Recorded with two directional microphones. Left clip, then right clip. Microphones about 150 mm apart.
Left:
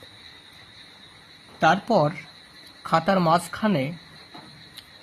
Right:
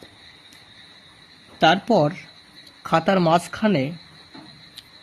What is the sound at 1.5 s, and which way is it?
Speech, 20° right (ahead or behind).